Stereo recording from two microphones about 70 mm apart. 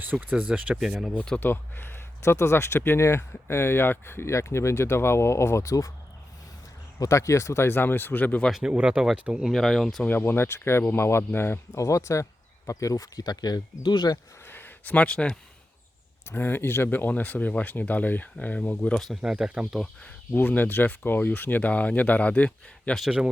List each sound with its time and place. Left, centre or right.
0.0 s speech: right; by 1.1 s centre
1.4 s speech: left
2.3 s speech: left
7.0 s speech: left
8.6 s speech: centre
9.5 s speech: centre
10.1 s speech: left
11.8 s speech: left
14.4 s a sound: left
16.3 s speech: left
18.9 s speech: centre
19.2 s speech: centre
20.3 s speech: left
23.0 s speech: centre